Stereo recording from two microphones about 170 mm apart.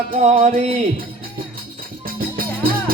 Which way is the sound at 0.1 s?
40° right (ahead or behind).